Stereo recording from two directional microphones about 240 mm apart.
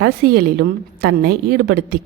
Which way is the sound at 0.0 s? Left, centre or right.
Right.